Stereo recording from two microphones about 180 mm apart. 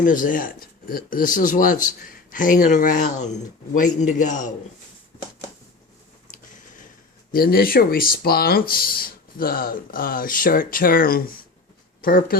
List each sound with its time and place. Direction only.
0.0 s speech: 45° left (ahead or behind)
7.3 s speech: 55° left (ahead or behind)